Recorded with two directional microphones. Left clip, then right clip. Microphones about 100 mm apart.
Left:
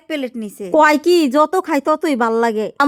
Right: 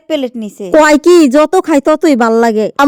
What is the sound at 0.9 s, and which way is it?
Speech, 90° right.